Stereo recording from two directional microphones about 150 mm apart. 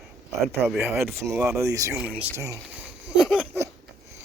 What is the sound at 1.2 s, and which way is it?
Speech, 20° right (ahead or behind).